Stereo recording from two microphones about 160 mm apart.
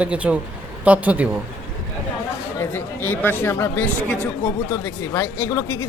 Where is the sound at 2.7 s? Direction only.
15° left (ahead or behind).